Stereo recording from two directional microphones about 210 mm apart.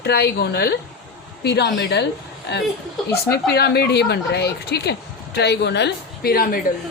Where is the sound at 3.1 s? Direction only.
50° left (ahead or behind).